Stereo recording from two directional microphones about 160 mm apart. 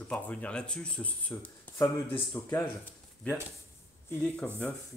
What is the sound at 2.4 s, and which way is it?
Speech, 25° left (ahead or behind).